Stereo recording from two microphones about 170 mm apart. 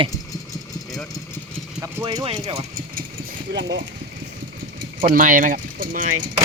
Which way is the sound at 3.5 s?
90° right.